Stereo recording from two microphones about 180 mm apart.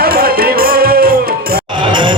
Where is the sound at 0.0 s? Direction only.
55° right (ahead or behind).